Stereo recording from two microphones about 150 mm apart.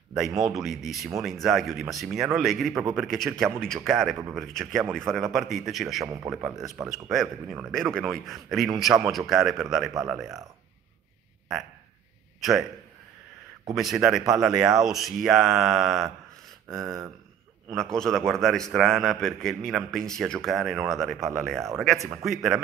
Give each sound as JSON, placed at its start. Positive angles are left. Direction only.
{"t": 0.6, "sound": "a man's voice", "side_deg": 0}
{"t": 2.7, "sound": "a man's voice", "side_deg": -15}
{"t": 3.0, "sound": "a man's voice", "side_deg": 0}
{"t": 6.0, "sound": "speech", "side_deg": -20}
{"t": 6.3, "sound": "a man's voice", "side_deg": -5}
{"t": 12.4, "sound": "a man's voice", "side_deg": 0}
{"t": 13.7, "sound": "a man's voice", "side_deg": 0}